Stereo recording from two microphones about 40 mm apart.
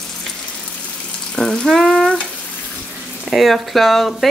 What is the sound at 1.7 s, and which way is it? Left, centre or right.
Frying, centre.